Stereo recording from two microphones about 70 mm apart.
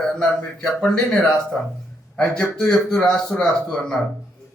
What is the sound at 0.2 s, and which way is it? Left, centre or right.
A man's voice, centre.